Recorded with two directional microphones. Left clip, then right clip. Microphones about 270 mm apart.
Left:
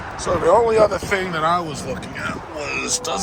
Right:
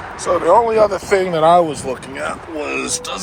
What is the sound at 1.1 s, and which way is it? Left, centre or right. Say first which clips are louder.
Speech: right 7 dB; centre.